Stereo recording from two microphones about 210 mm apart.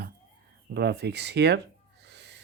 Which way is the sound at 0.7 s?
50° right (ahead or behind).